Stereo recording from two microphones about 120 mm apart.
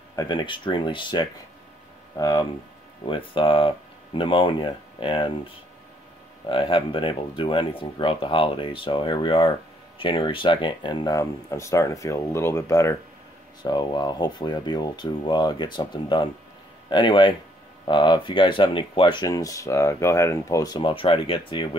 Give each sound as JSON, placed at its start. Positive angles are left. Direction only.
{"t": 0.1, "sound": "speech", "side_deg": 35}
{"t": 3.1, "sound": "speech", "side_deg": 45}
{"t": 6.5, "sound": "speech", "side_deg": 45}
{"t": 13.6, "sound": "speech", "side_deg": 35}
{"t": 19.2, "sound": "speech", "side_deg": 30}
{"t": 20.9, "sound": "speech", "side_deg": 50}